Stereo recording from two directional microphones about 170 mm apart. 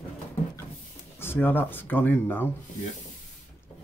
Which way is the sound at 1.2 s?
10° left (ahead or behind).